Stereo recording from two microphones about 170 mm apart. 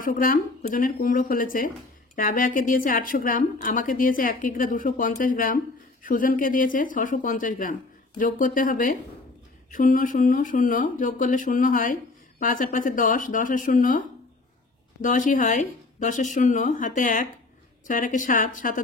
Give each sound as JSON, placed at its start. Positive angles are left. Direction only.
{"t": 0.0, "sound": "speech", "side_deg": 55}